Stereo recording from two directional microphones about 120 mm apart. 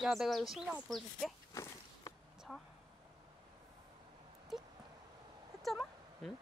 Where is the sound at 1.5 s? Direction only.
25° left (ahead or behind).